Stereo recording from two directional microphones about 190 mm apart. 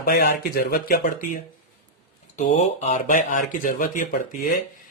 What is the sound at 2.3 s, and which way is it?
Speech, 35° left (ahead or behind).